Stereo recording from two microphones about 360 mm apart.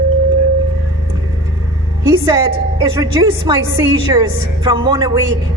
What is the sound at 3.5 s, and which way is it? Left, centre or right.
A woman's voice, centre.